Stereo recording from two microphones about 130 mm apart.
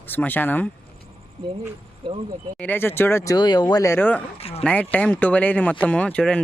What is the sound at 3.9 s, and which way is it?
Speech, 15° left (ahead or behind).